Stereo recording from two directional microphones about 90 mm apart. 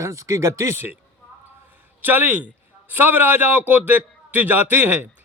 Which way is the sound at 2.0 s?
20° right (ahead or behind).